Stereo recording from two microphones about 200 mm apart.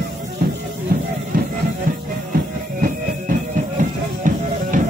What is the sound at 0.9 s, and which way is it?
Music, 45° right (ahead or behind).